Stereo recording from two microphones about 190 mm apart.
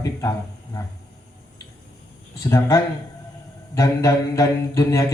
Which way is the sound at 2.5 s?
15° left (ahead or behind).